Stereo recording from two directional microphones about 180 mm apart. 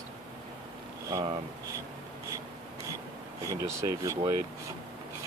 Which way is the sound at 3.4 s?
15° right (ahead or behind).